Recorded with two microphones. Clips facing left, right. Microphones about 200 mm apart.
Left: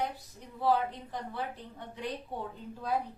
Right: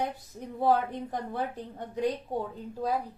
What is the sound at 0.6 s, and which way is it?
Speech, 50° right (ahead or behind).